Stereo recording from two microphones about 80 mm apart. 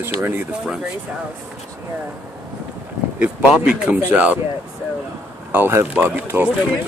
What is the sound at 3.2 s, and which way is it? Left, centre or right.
Speech, centre.